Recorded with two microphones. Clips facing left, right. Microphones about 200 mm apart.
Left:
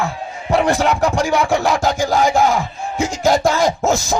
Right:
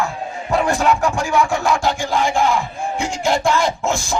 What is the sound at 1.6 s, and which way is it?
Crowd, 40° left (ahead or behind).